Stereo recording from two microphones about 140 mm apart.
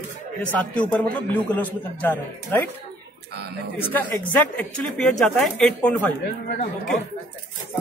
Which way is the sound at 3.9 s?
10° left (ahead or behind).